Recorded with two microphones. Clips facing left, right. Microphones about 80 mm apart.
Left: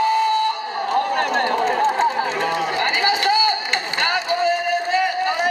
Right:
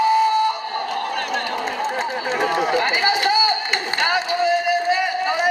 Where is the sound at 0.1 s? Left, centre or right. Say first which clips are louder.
Right 1 dB; centre.